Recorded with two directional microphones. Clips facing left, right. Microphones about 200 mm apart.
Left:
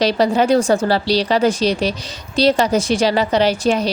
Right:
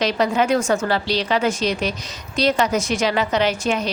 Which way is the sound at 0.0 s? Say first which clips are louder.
Left 4 dB; 35° left (ahead or behind).